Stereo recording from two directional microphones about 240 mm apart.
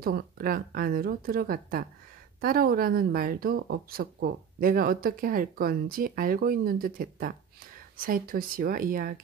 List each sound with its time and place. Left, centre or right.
0.0 s speech: right